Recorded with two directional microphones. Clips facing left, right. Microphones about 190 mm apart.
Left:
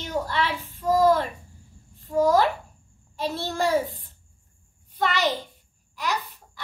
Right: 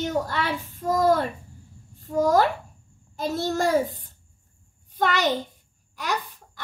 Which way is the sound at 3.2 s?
45° right (ahead or behind).